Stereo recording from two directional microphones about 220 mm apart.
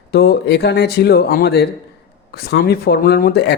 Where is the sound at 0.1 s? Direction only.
45° left (ahead or behind).